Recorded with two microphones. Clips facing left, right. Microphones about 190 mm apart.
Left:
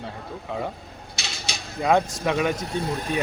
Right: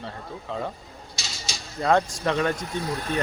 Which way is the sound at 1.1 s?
60° left (ahead or behind).